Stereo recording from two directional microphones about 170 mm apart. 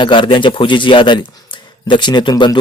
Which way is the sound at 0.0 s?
30° left (ahead or behind).